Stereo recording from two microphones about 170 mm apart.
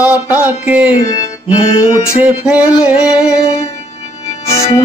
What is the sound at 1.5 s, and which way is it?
Music, 35° left (ahead or behind).